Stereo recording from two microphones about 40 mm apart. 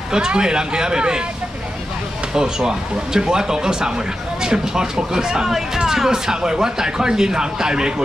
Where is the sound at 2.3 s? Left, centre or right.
Centre.